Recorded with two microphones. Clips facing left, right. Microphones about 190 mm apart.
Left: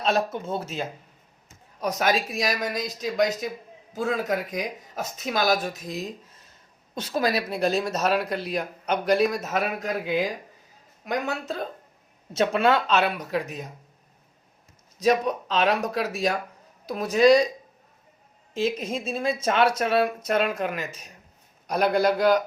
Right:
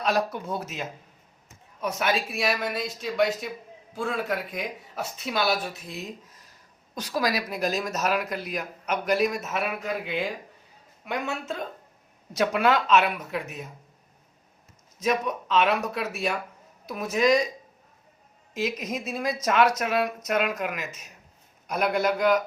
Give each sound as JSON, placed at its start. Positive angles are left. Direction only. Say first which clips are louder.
{"t": 0.0, "sound": "a woman's voice", "louder": "left 1 dB", "side_deg": 25}
{"t": 14.9, "sound": "speech", "louder": "left 4 dB", "side_deg": 35}
{"t": 18.5, "sound": "a woman's voice", "louder": "left 3 dB", "side_deg": 30}